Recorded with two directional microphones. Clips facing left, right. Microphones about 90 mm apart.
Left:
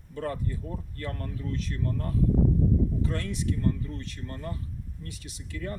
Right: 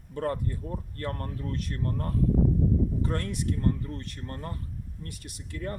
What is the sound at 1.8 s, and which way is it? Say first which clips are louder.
Speech: even; 40° right (ahead or behind).